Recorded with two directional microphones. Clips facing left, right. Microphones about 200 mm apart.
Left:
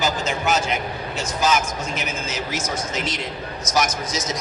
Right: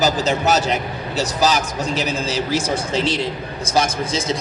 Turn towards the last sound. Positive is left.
turn(degrees=-30)  # may be behind; listen again after turning